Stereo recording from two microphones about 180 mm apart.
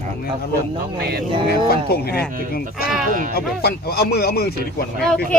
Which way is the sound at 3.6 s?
60° left (ahead or behind).